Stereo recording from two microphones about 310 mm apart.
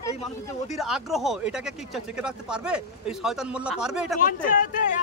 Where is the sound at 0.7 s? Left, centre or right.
Centre.